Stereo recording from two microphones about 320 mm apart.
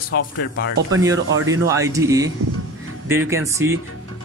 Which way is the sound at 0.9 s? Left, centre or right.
Centre.